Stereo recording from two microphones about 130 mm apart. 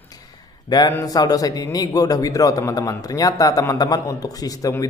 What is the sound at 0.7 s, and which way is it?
A man's voice, 30° left (ahead or behind).